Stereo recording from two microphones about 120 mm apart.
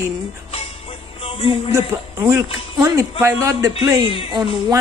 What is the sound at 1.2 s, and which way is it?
Music, 55° left (ahead or behind).